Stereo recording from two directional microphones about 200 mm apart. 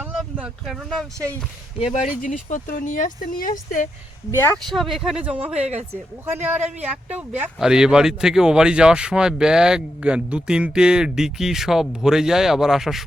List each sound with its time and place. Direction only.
0.0 s speech: 5° right (ahead or behind)
2.2 s speech: 40° left (ahead or behind)
4.3 s speech: 10° left (ahead or behind)
4.7 s speech: centre (ahead or behind)